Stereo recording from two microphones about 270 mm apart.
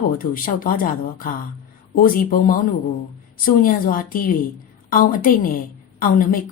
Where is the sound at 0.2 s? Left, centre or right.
Left.